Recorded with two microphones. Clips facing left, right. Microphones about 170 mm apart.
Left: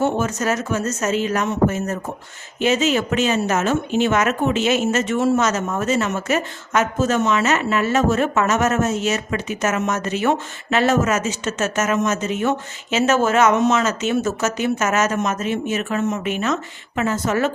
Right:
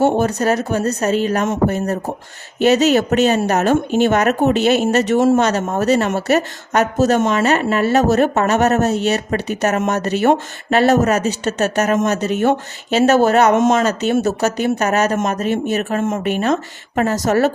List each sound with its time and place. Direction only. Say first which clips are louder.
0.0 s speech: right 5 dB; 35° right (ahead or behind)
7.4 s speech: right 4 dB; 35° right (ahead or behind)
13.5 s speech: right 4 dB; 45° right (ahead or behind)